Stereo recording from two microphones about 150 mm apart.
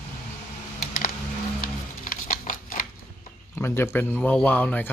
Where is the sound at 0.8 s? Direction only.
65° left (ahead or behind).